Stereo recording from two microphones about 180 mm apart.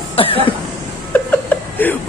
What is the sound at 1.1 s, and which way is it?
Chuckle, 10° left (ahead or behind).